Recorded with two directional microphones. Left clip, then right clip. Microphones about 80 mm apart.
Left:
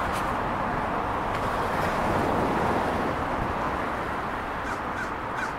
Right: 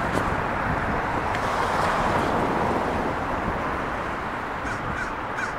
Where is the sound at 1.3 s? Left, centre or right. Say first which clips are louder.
Right 3 dB; right.